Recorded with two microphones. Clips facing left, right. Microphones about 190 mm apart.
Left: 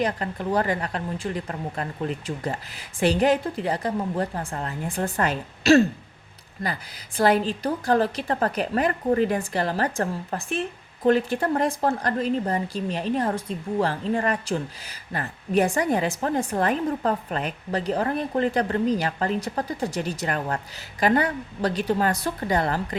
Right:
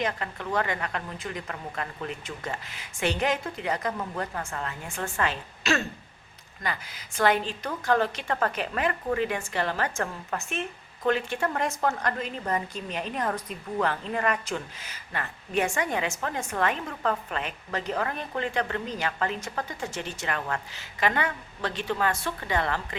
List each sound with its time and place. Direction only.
0.0 s a woman's voice: 35° left (ahead or behind)